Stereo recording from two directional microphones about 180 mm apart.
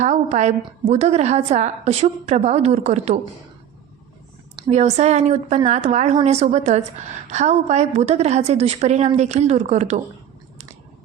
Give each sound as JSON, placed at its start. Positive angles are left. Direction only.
{"t": 0.0, "sound": "a woman's voice", "side_deg": -40}
{"t": 4.5, "sound": "a woman's voice", "side_deg": -35}